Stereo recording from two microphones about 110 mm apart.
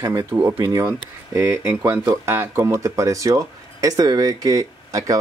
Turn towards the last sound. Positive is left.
turn(degrees=-30)  # may be behind; listen again after turning